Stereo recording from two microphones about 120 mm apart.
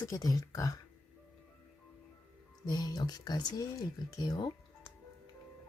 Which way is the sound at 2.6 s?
35° left (ahead or behind).